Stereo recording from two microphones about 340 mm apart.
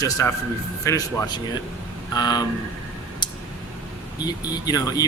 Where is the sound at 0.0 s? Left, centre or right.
Centre.